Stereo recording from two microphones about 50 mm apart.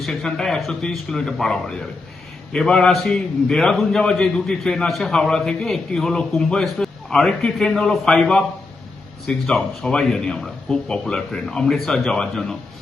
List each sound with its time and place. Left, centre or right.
0.0 s a man's voice: centre
2.9 s a man's voice: centre
6.8 s a sound: centre
7.3 s a man's voice: centre